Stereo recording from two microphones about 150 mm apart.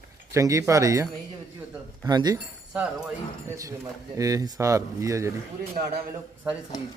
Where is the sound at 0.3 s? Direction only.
20° right (ahead or behind).